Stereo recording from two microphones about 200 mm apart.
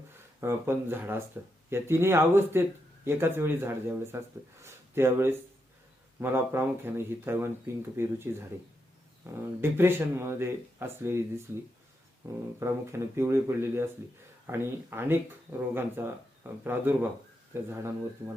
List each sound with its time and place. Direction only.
0.3 s speech: 10° right (ahead or behind)
4.6 s a sound: 10° right (ahead or behind)
6.1 s speech: 10° right (ahead or behind)
12.5 s speech: 15° right (ahead or behind)